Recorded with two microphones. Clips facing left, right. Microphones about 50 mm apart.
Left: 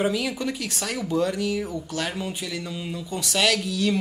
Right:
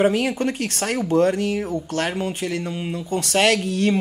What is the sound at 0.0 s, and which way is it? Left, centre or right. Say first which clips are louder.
Speech: right 6 dB; right.